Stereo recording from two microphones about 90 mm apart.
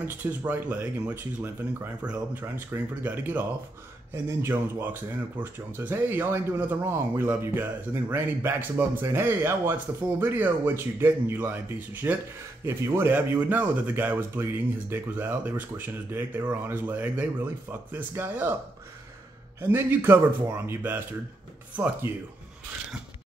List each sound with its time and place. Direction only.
0.0 s speech: 20° right (ahead or behind)
2.9 s speech: 20° right (ahead or behind)
4.1 s speech: 30° right (ahead or behind)
19.6 s speech: 25° right (ahead or behind)